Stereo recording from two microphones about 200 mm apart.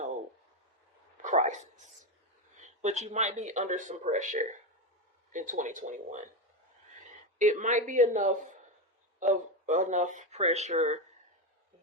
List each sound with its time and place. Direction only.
1.2 s a sound: 40° right (ahead or behind)
2.6 s speech: 35° right (ahead or behind)
7.3 s speech: 35° right (ahead or behind)